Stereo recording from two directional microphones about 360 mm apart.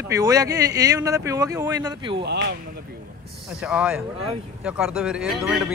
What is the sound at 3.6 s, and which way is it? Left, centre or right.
Speech, centre.